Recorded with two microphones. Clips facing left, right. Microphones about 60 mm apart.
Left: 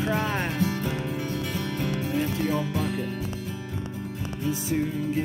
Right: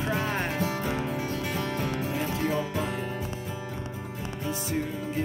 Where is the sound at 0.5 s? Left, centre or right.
Right.